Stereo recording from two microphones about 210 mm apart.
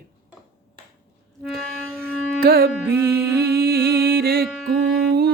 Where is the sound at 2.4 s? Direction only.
45° right (ahead or behind).